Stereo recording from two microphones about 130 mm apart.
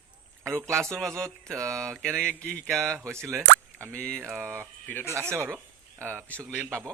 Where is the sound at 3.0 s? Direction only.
20° right (ahead or behind).